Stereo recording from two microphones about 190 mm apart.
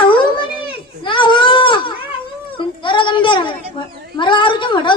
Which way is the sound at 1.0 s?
25° left (ahead or behind).